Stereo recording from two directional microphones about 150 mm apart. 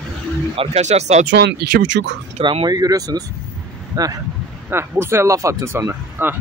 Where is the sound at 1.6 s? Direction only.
90° right.